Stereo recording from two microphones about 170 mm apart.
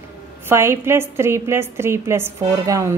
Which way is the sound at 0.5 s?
15° right (ahead or behind).